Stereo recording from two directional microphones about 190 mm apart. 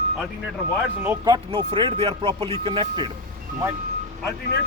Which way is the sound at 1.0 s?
15° right (ahead or behind).